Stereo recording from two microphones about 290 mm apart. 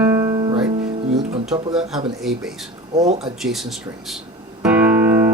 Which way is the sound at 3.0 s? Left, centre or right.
Right.